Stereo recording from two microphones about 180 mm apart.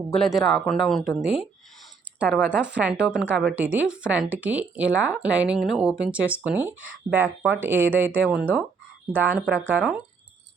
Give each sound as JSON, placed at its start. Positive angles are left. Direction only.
{"t": 0.1, "sound": "speech", "side_deg": 0}